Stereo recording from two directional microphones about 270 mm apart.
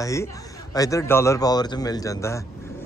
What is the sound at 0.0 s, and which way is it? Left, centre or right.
Speech, centre.